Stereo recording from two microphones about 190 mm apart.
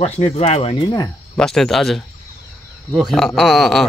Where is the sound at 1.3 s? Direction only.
Centre (ahead or behind).